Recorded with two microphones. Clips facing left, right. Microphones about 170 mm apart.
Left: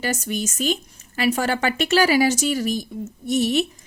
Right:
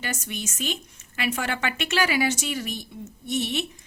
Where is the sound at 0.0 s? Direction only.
40° left (ahead or behind).